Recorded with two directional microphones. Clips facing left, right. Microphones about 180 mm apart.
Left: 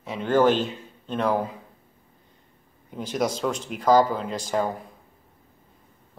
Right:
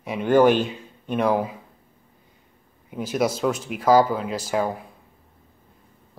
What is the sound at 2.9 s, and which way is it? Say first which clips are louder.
Speech: right 3 dB; 5° right (ahead or behind).